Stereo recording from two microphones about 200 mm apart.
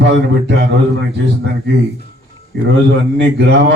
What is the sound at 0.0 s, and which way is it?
Speech, 60° right (ahead or behind).